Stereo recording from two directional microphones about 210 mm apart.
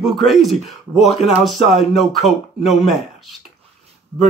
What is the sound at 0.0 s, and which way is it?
Groan, centre (ahead or behind).